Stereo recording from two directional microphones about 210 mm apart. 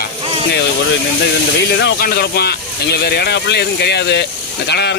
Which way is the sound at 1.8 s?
50° left (ahead or behind).